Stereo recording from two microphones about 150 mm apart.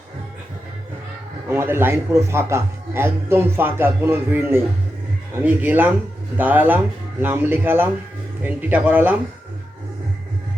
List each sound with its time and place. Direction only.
1.5 s speech: 15° right (ahead or behind)